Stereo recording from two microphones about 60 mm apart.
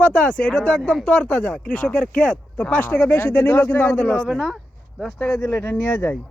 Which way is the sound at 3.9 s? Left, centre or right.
Centre.